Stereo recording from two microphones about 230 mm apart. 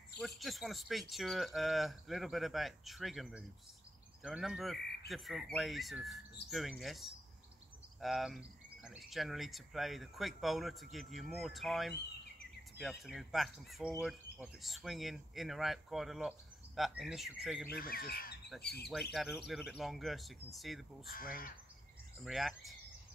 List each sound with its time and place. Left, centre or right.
0.4 s speech: centre
13.0 s speech: centre
17.6 s speech: left
18.5 s speech: centre
21.1 s speech: left
22.2 s speech: centre